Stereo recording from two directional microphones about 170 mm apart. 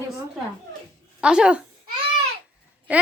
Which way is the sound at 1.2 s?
5° right (ahead or behind).